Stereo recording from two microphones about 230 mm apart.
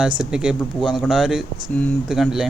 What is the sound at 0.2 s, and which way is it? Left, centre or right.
Speech, centre.